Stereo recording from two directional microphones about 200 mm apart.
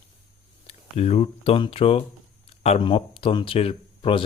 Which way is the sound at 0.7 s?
30° left (ahead or behind).